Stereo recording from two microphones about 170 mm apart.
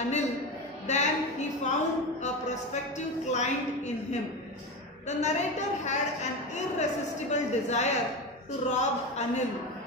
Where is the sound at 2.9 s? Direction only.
45° left (ahead or behind).